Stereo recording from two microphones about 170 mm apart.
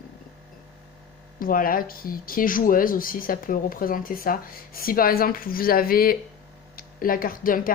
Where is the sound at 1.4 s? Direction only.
55° left (ahead or behind).